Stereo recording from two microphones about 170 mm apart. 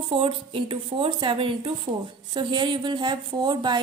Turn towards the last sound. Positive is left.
turn(degrees=-25)  # may be behind; listen again after turning